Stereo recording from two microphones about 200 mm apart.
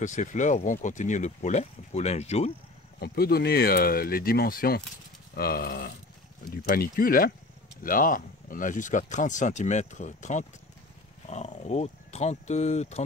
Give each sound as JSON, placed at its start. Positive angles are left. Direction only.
{"t": 0.0, "sound": "speech", "side_deg": 40}
{"t": 3.0, "sound": "speech", "side_deg": 50}